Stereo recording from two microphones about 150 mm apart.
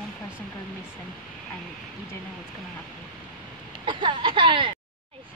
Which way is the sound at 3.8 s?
30° right (ahead or behind).